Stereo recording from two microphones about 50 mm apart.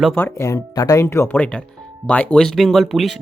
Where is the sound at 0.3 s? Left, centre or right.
Left.